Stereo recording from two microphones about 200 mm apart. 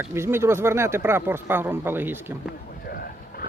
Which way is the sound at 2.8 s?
50° left (ahead or behind).